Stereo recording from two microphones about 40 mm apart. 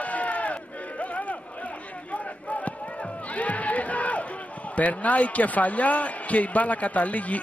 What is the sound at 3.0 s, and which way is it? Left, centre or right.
Crowd, left.